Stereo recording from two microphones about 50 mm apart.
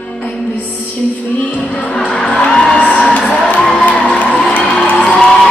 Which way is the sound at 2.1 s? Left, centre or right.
Centre.